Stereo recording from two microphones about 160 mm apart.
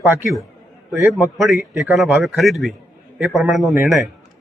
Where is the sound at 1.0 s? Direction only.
Centre (ahead or behind).